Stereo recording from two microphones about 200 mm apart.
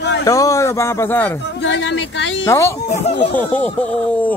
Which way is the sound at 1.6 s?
65° left (ahead or behind).